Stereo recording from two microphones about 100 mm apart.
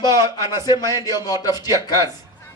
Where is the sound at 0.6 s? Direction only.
40° left (ahead or behind).